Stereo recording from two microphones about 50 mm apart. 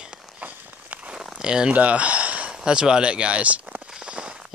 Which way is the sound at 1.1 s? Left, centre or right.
Centre.